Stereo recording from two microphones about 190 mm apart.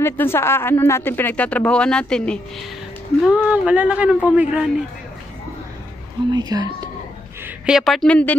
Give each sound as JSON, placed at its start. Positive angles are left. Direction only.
{"t": 0.0, "sound": "speech", "side_deg": 15}
{"t": 3.3, "sound": "speech", "side_deg": -5}
{"t": 6.3, "sound": "speech", "side_deg": -20}
{"t": 7.4, "sound": "a woman's voice", "side_deg": -5}